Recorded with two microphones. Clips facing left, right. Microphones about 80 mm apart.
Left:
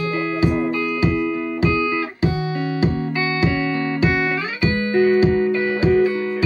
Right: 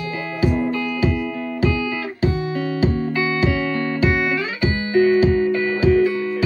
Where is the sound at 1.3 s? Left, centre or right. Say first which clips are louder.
Left 2 dB; centre.